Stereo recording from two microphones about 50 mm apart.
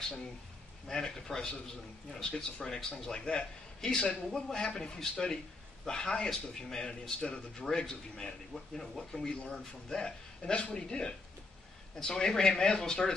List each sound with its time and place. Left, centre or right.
0.8 s speech: centre
2.6 s speech: centre